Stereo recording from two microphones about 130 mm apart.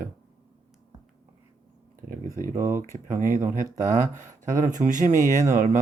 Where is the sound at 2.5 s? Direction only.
20° right (ahead or behind).